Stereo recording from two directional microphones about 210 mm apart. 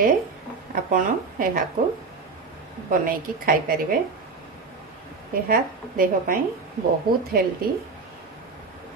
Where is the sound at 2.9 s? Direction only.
45° right (ahead or behind).